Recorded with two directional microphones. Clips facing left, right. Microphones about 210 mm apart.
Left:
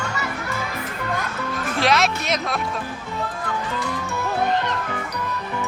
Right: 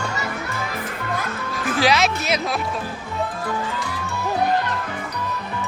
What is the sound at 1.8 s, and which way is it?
Speech, centre (ahead or behind).